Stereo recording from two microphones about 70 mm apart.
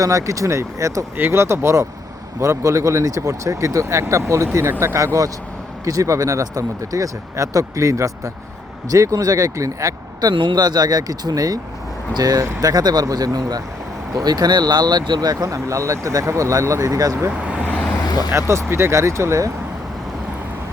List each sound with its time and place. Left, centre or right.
0.0 s speech: right
1.1 s speech: right
15.4 s speech: right
17.3 s speech: centre
17.7 s vehicle: centre
18.0 s vehicle: left
18.3 s speech: right